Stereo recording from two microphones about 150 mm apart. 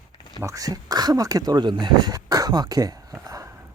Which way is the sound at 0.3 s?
25° right (ahead or behind).